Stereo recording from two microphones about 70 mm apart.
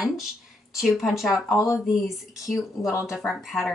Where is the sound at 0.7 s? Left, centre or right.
Centre.